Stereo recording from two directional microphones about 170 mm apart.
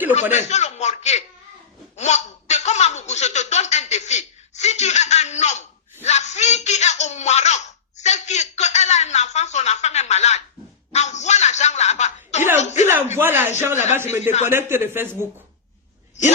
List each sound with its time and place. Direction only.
0.2 s a man's voice: 40° left (ahead or behind)
2.0 s a sound: 40° left (ahead or behind)
13.1 s a sound: 15° right (ahead or behind)
13.9 s a man's voice: 15° right (ahead or behind)
14.2 s a man's voice: 40° left (ahead or behind)
14.5 s a man's voice: 15° right (ahead or behind)